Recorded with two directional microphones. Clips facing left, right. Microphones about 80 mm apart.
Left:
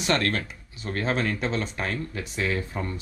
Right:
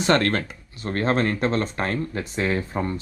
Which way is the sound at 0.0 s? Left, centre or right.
Right.